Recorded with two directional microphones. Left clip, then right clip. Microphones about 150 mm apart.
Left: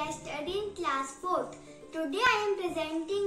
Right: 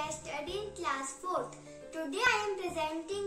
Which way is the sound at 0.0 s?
15° right (ahead or behind).